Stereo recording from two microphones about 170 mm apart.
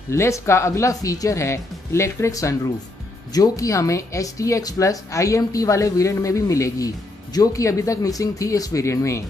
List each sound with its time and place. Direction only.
0.1 s speech: 15° left (ahead or behind)